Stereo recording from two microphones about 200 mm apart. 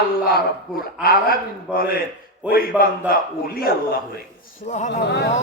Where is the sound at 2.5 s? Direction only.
45° left (ahead or behind).